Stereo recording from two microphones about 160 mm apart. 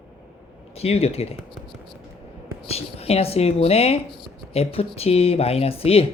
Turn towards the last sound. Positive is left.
turn(degrees=35)  # may be behind; listen again after turning